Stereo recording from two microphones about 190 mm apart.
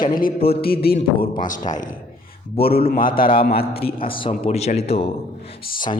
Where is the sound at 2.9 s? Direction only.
50° left (ahead or behind).